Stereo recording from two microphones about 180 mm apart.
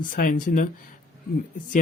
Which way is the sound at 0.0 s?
50° left (ahead or behind).